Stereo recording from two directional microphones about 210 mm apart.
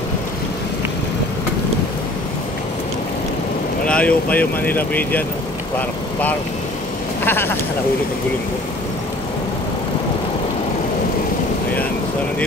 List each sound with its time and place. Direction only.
3.8 s speech: 5° left (ahead or behind)
7.2 s speech: 10° left (ahead or behind)